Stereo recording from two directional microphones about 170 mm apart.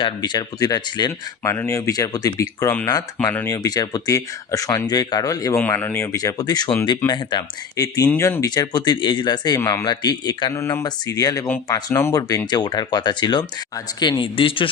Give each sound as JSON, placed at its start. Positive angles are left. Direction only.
{"t": 0.0, "sound": "speech", "side_deg": 25}
{"t": 9.6, "sound": "speech", "side_deg": 15}
{"t": 9.8, "sound": "a man's voice", "side_deg": 25}